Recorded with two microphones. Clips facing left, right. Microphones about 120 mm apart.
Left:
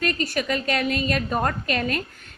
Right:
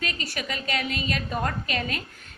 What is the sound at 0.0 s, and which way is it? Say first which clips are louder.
A woman's voice: left 7 dB; 45° left (ahead or behind).